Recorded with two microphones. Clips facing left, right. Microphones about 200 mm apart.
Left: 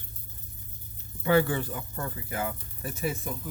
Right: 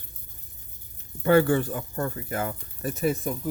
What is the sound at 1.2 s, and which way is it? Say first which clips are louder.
Speech: right 4 dB; 50° right (ahead or behind).